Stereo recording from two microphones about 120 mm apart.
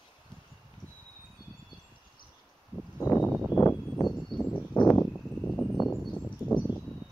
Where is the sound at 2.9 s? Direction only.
20° left (ahead or behind).